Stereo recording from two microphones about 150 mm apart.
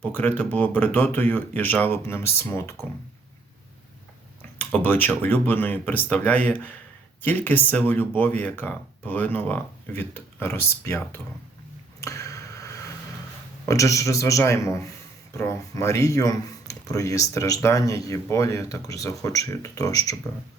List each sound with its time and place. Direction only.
0.0 s speech: 10° left (ahead or behind)
4.5 s speech: 10° left (ahead or behind)
11.9 s arrow: 20° left (ahead or behind)
13.7 s a man's voice: 20° left (ahead or behind)